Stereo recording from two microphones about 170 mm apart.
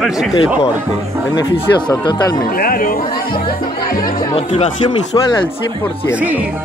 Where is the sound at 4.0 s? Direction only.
25° left (ahead or behind).